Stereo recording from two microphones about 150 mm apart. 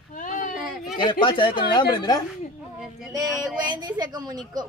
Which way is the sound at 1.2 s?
30° left (ahead or behind).